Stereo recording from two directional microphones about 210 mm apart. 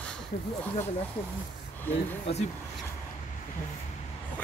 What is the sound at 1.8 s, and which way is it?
Speech, 10° left (ahead or behind).